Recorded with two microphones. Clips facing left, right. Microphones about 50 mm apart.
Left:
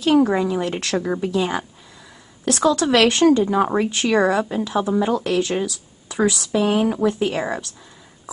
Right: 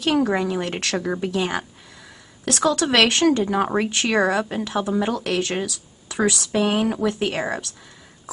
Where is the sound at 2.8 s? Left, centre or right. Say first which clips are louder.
Left 2 dB; right.